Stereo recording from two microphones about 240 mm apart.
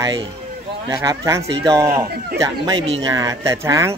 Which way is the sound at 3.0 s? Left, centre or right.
Centre.